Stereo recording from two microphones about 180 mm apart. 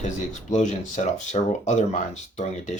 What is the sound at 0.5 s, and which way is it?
Speech, 40° left (ahead or behind).